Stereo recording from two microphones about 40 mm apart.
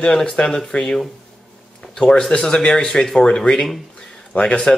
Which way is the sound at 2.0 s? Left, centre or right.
Left.